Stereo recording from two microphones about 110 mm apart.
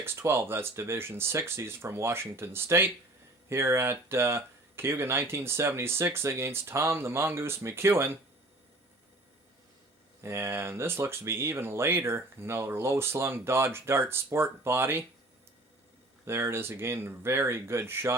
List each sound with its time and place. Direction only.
0.0 s speech: 25° right (ahead or behind)
10.2 s speech: 25° right (ahead or behind)
16.2 s speech: 20° right (ahead or behind)